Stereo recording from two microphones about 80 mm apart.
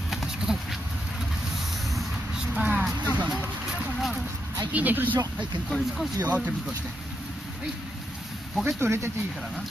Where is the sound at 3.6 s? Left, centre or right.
Centre.